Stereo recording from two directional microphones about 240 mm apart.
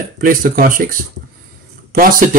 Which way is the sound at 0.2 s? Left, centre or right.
Right.